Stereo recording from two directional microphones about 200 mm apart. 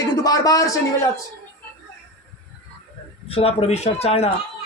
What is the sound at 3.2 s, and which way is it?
A man's voice, 30° left (ahead or behind).